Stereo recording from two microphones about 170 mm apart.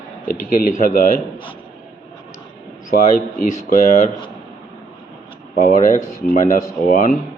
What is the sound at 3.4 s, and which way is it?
Speech, 45° left (ahead or behind).